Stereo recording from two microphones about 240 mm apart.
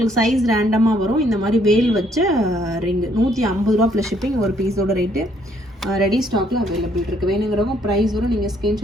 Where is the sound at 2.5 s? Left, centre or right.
Centre.